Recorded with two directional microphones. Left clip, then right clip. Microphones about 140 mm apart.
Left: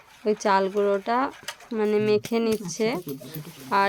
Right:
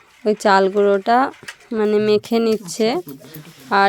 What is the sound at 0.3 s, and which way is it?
Speech, 40° right (ahead or behind).